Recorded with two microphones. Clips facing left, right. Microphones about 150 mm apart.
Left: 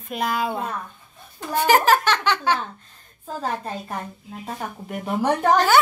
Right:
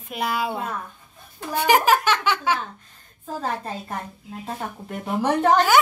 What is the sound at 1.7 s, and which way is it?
Speech, 10° right (ahead or behind).